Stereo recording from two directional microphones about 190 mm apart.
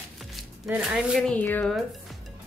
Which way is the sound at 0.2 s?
Centre (ahead or behind).